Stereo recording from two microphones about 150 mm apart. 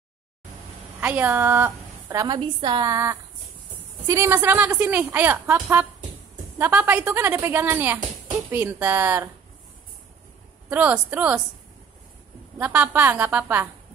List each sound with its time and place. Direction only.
1.0 s a woman's voice: 10° right (ahead or behind)
2.2 s a woman's voice: 30° right (ahead or behind)
2.9 s a woman's voice: 20° right (ahead or behind)
10.7 s a woman's voice: 10° right (ahead or behind)
12.5 s a woman's voice: 10° right (ahead or behind)